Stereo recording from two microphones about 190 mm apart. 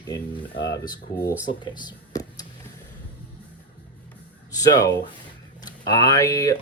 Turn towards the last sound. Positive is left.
turn(degrees=15)  # may be behind; listen again after turning